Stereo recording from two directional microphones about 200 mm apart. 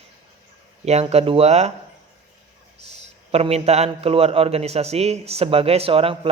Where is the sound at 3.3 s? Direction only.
30° right (ahead or behind).